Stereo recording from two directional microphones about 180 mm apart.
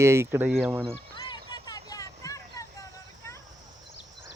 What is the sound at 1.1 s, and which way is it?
Vehicle, 25° left (ahead or behind).